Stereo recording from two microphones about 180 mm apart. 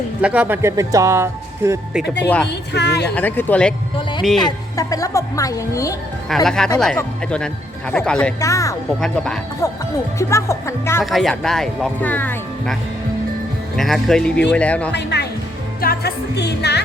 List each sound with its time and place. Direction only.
0.2 s speech: 5° right (ahead or behind)
2.2 s speech: 10° left (ahead or behind)
2.5 s speech: 70° left (ahead or behind)
3.2 s speech: 10° left (ahead or behind)
4.4 s speech: 20° left (ahead or behind)
6.2 s speech: centre (ahead or behind)
8.4 s speech: 20° left (ahead or behind)
9.0 s speech: 5° left (ahead or behind)
10.2 s speech: 15° left (ahead or behind)
11.0 s speech: centre (ahead or behind)
13.7 s speech: centre (ahead or behind)
14.9 s speech: 70° left (ahead or behind)